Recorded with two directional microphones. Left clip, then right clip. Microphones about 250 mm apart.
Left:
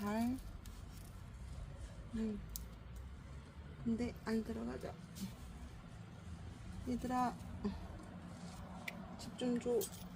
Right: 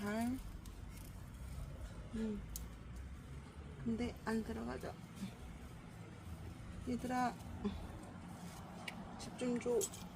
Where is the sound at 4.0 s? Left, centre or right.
Centre.